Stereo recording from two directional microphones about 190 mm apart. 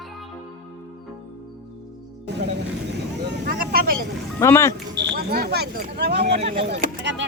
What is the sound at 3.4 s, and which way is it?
Vehicle, 50° right (ahead or behind).